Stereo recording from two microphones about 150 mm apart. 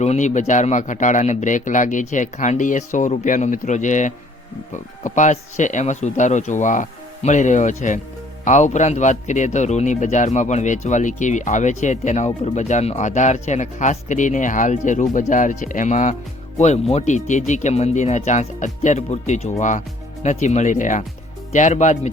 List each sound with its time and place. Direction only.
0.0 s a man's voice: 50° left (ahead or behind)